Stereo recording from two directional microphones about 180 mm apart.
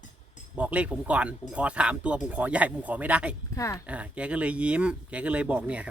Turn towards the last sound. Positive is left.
turn(degrees=-5)  # may be behind; listen again after turning